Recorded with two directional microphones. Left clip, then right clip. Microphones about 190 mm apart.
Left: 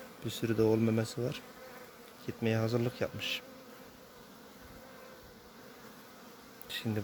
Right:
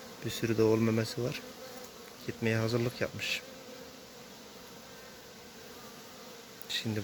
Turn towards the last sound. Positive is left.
turn(degrees=30)  # may be behind; listen again after turning